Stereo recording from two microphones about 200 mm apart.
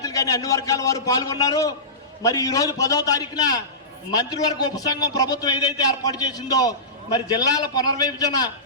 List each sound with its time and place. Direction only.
0.0 s a man's voice: 15° left (ahead or behind)